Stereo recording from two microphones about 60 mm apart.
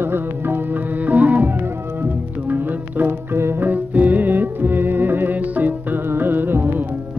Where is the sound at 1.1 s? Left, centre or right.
Right.